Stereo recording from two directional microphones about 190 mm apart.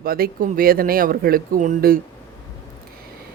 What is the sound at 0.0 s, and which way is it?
Speech, 50° right (ahead or behind).